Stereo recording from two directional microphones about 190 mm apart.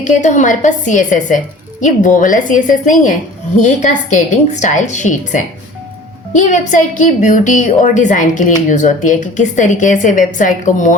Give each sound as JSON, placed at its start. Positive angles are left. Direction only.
{"t": 0.0, "sound": "a woman's voice", "side_deg": 40}